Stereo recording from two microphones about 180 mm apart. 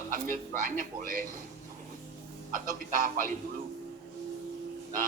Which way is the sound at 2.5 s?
50° right (ahead or behind).